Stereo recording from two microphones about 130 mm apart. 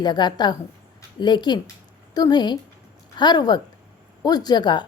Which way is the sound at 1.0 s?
35° left (ahead or behind).